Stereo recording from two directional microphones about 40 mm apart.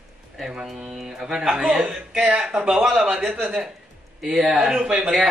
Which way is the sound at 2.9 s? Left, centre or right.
Centre.